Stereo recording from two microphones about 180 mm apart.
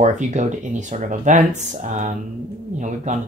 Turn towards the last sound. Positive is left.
turn(degrees=-45)  # may be behind; listen again after turning